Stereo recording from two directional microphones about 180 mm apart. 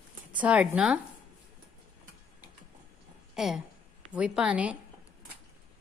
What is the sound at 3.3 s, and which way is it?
A woman's voice, centre (ahead or behind).